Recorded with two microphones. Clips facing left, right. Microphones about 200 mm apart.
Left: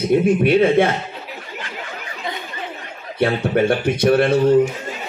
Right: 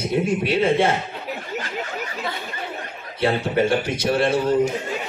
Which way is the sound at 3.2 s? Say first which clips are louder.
Left 3 dB; 55° left (ahead or behind).